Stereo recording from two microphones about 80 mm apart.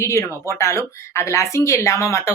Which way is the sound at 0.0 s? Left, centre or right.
Left.